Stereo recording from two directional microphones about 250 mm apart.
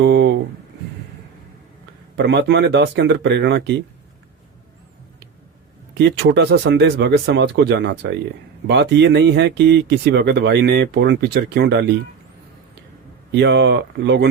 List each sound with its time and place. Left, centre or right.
0.0 s a sound: right
2.1 s speech: right
5.9 s speech: right
13.3 s speech: right